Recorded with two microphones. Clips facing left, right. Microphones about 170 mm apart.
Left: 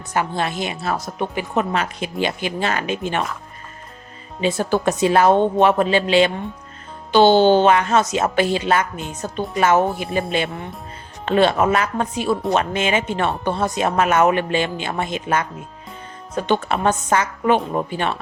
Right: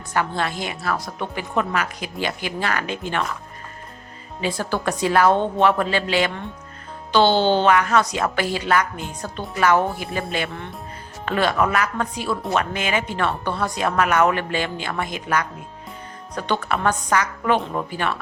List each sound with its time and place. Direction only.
0.1 s speech: 20° left (ahead or behind)
4.4 s speech: 20° left (ahead or behind)